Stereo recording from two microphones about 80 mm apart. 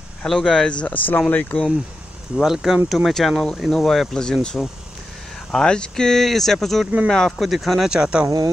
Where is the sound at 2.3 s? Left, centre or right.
Centre.